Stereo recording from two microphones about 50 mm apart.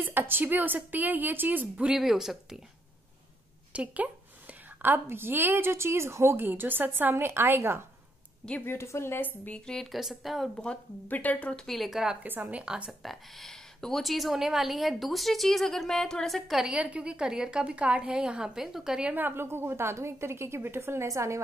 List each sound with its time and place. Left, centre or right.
0.0 s a woman's voice: right
2.0 s a woman's voice: centre
3.7 s a woman's voice: right
6.4 s a woman's voice: right
8.6 s a woman's voice: left
9.8 s a woman's voice: centre
10.5 s speech: centre
11.1 s speech: left
11.6 s a woman's voice: centre
12.2 s a woman's voice: right
12.5 s a woman's voice: right
13.0 s a woman's voice: centre
16.7 s a woman's voice: right; by 18.9 s centre
19.1 s a woman's voice: right